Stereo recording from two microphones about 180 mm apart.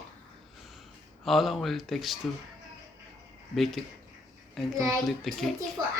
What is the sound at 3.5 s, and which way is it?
Speech, centre (ahead or behind).